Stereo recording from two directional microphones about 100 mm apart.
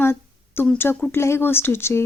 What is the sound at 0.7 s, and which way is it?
Speech, 20° left (ahead or behind).